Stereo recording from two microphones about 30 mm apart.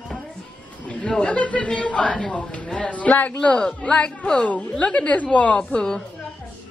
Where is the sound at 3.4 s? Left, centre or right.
Left.